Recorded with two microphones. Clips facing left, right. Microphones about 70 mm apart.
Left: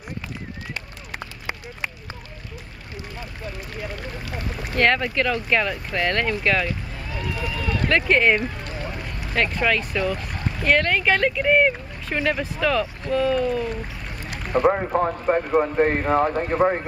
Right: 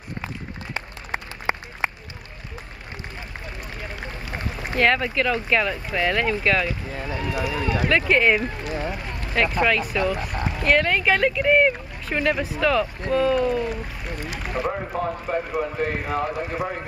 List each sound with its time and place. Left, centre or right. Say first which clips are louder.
0.7 s run: right 3 dB; right
4.7 s speech: even; centre
7.1 s speech: right 3 dB; centre
7.7 s speech: left 1 dB; centre
15.0 s speech: left 4 dB; left